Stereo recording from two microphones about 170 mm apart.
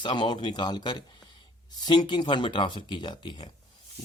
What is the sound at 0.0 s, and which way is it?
Speech, 25° left (ahead or behind).